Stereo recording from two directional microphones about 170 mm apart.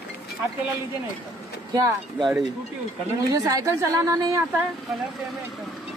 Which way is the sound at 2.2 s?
Centre (ahead or behind).